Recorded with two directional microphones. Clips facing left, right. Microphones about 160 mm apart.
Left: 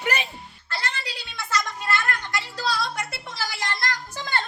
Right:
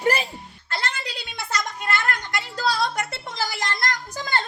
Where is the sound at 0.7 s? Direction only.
45° right (ahead or behind).